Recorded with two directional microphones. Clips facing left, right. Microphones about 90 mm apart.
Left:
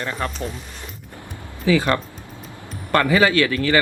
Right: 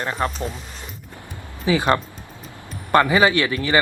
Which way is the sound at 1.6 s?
20° right (ahead or behind).